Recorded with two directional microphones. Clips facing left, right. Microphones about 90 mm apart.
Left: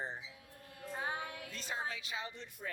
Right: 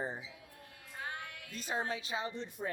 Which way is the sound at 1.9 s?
30° right (ahead or behind).